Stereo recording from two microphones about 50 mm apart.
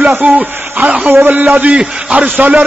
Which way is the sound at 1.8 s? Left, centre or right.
Right.